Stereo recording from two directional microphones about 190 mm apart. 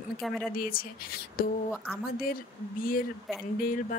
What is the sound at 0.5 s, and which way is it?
Speech, 50° left (ahead or behind).